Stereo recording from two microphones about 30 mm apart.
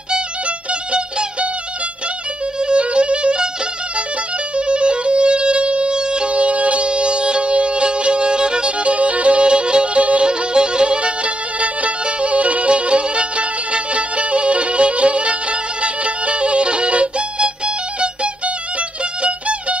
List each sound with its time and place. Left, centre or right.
2.6 s music: right
4.6 s music: right
6.3 s music: right
6.9 s music: right
8.6 s music: right
9.5 s music: right
9.9 s music: right
10.2 s music: right
11.6 s music: right
19.2 s music: right